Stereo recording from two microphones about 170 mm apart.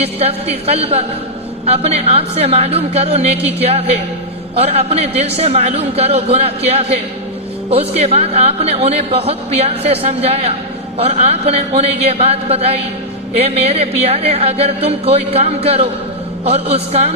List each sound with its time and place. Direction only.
0.0 s speech: 35° right (ahead or behind)